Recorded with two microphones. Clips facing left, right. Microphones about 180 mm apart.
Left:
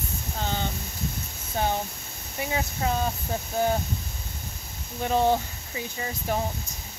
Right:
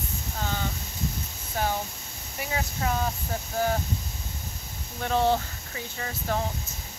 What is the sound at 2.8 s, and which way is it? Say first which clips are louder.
Speech: left 1 dB; 25° left (ahead or behind).